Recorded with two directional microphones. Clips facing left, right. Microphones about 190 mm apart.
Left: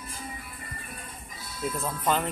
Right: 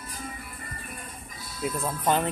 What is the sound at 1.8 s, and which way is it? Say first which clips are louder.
Speech: right 2 dB; 15° right (ahead or behind).